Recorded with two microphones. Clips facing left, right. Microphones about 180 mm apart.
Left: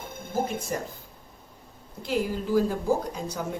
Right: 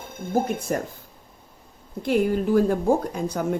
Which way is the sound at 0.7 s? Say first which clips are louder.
Right 5 dB; 55° right (ahead or behind).